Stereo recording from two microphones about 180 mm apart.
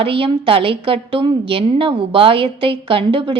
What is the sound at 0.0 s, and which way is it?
A woman's voice, 30° right (ahead or behind).